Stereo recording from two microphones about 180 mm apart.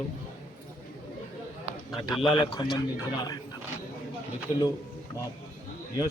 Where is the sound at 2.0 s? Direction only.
25° left (ahead or behind).